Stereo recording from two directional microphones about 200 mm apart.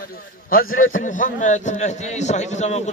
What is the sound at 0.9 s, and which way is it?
A man's voice, 40° left (ahead or behind).